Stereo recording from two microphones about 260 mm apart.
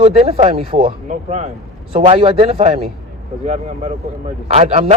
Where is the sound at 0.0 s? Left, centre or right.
Right.